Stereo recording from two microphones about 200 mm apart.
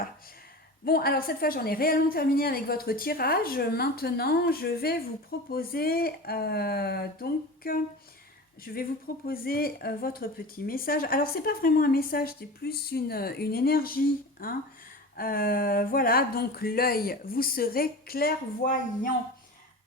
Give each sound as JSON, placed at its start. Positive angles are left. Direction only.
{"t": 0.9, "sound": "a woman's voice", "side_deg": 50}